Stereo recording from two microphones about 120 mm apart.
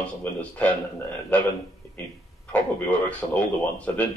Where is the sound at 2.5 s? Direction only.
10° left (ahead or behind).